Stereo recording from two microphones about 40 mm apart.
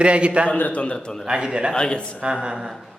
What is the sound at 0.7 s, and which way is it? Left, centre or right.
Speech, left.